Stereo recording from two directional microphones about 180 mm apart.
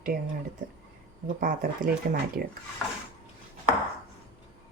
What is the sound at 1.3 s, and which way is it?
Speech, 50° right (ahead or behind).